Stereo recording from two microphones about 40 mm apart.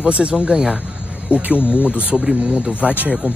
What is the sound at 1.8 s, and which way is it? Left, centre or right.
Speech, right.